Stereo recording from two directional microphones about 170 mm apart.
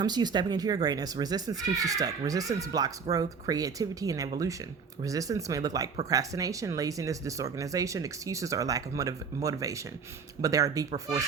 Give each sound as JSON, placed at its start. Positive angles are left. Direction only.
{"t": 0.0, "sound": "speech", "side_deg": -25}